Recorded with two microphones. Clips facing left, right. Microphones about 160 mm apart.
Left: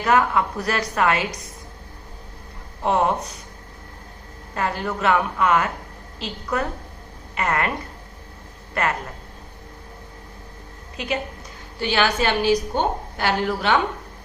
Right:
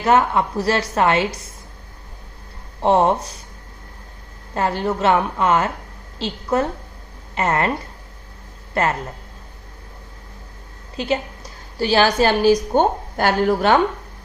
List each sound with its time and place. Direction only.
0.0 s a woman's voice: 25° right (ahead or behind)
2.8 s speech: 30° right (ahead or behind)
4.5 s a woman's voice: 30° right (ahead or behind)
8.8 s a woman's voice: 30° right (ahead or behind)
10.9 s a woman's voice: 30° right (ahead or behind)